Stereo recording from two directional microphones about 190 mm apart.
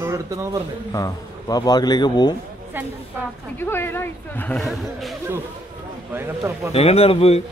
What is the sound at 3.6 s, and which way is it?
A man's voice, 10° left (ahead or behind).